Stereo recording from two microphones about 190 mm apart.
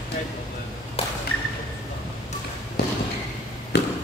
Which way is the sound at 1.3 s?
60° right (ahead or behind).